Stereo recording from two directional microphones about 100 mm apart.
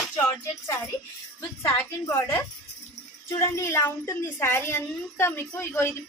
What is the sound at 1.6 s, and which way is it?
A woman's voice, 30° left (ahead or behind).